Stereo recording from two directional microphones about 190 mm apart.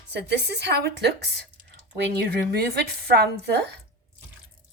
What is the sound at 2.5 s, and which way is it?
Speech, 60° right (ahead or behind).